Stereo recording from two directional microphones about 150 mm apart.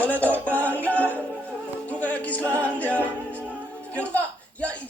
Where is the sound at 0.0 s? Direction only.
10° left (ahead or behind).